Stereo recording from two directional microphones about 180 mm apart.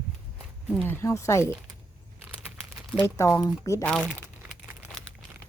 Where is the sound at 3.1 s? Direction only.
15° left (ahead or behind).